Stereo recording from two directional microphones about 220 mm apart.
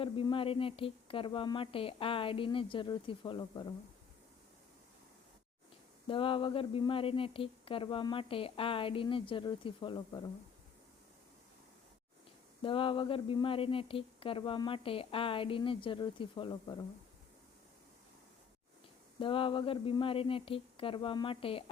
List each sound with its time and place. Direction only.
0.0 s speech: 25° left (ahead or behind)
6.1 s speech: 25° left (ahead or behind)
12.6 s speech: 25° left (ahead or behind)
19.2 s speech: 25° left (ahead or behind)